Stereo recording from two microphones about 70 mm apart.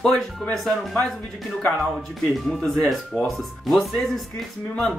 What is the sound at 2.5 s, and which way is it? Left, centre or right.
Speech, centre.